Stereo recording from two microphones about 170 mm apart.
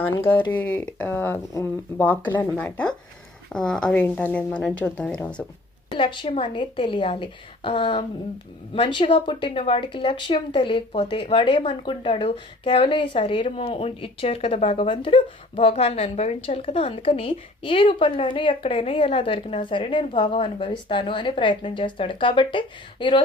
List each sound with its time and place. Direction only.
0.2 s speech: 10° left (ahead or behind)
6.0 s a woman's voice: 30° left (ahead or behind)